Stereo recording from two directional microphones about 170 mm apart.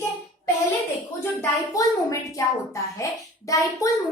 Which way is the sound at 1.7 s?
20° left (ahead or behind).